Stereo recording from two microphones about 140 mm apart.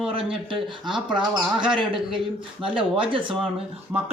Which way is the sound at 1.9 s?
35° right (ahead or behind).